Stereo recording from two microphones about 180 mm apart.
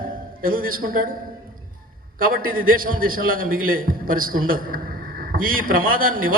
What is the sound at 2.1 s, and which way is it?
A man's voice, 50° right (ahead or behind).